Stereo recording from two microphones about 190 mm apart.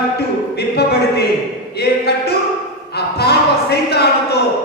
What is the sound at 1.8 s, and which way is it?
Speech, 60° left (ahead or behind).